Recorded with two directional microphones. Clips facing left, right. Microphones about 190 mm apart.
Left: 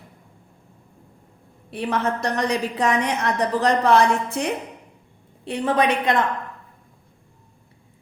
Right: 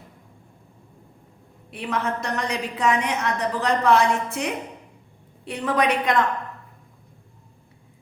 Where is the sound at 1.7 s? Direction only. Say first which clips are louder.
Left 3 dB; 35° left (ahead or behind).